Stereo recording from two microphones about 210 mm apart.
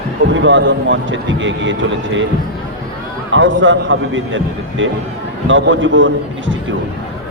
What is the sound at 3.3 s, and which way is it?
Speech, 65° right (ahead or behind).